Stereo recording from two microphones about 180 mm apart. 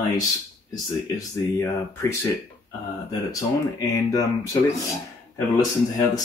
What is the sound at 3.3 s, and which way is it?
Speech, 20° left (ahead or behind).